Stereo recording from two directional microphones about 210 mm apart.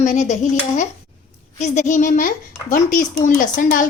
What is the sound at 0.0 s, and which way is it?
Speech, 35° left (ahead or behind).